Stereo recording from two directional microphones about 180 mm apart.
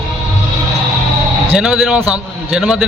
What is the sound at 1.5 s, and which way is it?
Speech, 5° right (ahead or behind).